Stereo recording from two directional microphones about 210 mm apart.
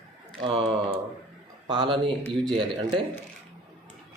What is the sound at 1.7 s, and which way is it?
Speech, 25° right (ahead or behind).